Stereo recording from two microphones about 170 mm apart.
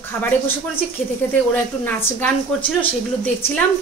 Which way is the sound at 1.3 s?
10° left (ahead or behind).